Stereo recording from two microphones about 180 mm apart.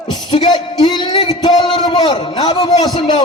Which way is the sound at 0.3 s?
25° left (ahead or behind).